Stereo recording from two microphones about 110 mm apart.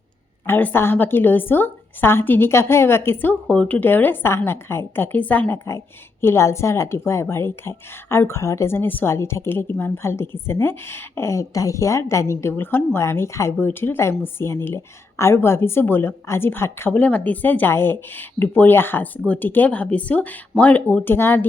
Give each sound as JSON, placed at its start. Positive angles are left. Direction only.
{"t": 0.4, "sound": "a woman's voice", "side_deg": 20}